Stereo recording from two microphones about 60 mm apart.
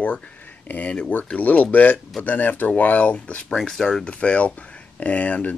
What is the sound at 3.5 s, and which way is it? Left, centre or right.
Speech, centre.